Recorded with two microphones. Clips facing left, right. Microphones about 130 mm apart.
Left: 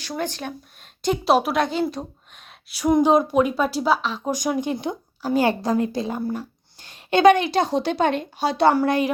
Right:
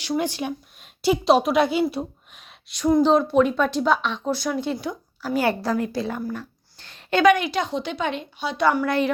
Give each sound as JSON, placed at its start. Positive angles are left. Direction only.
{"t": 0.0, "sound": "speech", "side_deg": -15}
{"t": 1.0, "sound": "a woman's voice", "side_deg": 0}
{"t": 6.7, "sound": "a sound", "side_deg": 15}
{"t": 7.3, "sound": "speech", "side_deg": 30}
{"t": 8.9, "sound": "speech", "side_deg": 15}